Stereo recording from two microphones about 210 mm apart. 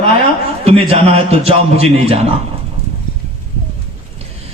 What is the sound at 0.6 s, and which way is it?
A man's voice, 30° right (ahead or behind).